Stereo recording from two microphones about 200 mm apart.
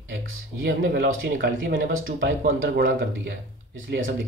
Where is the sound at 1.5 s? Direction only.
75° right (ahead or behind).